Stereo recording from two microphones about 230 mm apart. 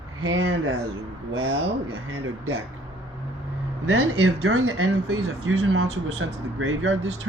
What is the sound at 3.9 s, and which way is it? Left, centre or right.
Speech, right.